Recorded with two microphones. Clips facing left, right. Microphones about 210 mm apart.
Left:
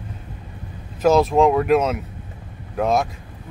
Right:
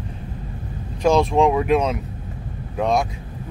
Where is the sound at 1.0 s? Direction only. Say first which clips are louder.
Left 1 dB; 5° left (ahead or behind).